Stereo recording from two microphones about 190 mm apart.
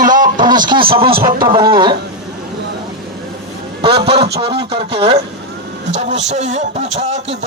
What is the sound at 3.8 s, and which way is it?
Speech, 30° right (ahead or behind).